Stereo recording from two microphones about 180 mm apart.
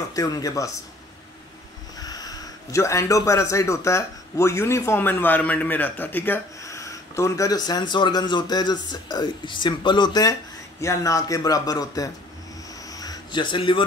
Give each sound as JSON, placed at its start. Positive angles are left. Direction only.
{"t": 0.1, "sound": "a man's voice", "side_deg": 20}
{"t": 2.0, "sound": "a man's voice", "side_deg": 20}
{"t": 12.9, "sound": "a sound", "side_deg": 20}